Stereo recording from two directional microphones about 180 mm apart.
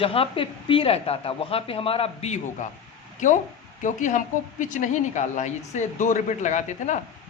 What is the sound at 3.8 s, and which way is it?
A woman's voice, 45° left (ahead or behind).